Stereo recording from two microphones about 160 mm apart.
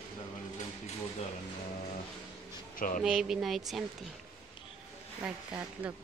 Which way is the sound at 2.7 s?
60° left (ahead or behind).